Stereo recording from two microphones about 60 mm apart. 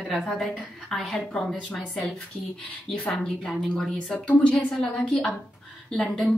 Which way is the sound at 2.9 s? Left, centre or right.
Centre.